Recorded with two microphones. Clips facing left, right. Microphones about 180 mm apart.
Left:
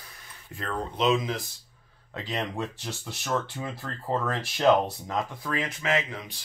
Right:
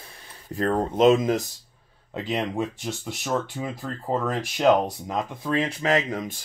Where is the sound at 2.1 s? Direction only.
15° right (ahead or behind); by 6.4 s 45° right (ahead or behind).